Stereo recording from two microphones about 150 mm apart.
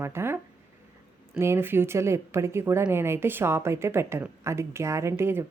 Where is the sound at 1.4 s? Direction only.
15° right (ahead or behind).